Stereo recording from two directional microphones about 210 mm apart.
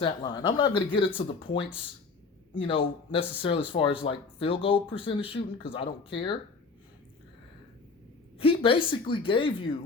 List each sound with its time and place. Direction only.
0.0 s speech: 20° left (ahead or behind)
8.4 s speech: 25° left (ahead or behind)